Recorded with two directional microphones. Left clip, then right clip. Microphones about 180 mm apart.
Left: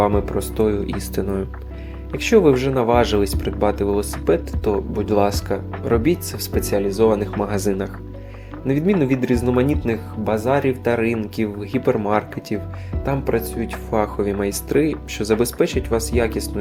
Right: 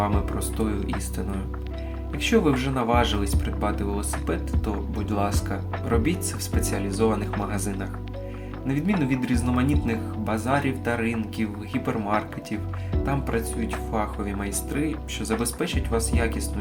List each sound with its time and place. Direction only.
0.0 s speech: 40° left (ahead or behind)
9.0 s speech: 40° left (ahead or behind)